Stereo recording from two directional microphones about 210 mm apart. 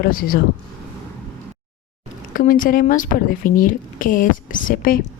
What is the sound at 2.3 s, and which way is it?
A woman's voice, 40° left (ahead or behind).